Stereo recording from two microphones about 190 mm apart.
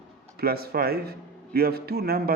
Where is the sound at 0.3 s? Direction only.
55° right (ahead or behind).